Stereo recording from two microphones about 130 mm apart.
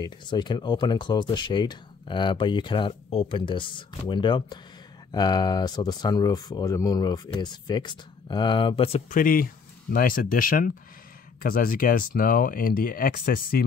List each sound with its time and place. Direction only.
0.0 s speech: 35° left (ahead or behind)
2.9 s speech: 50° left (ahead or behind)
9.1 s speech: 90° left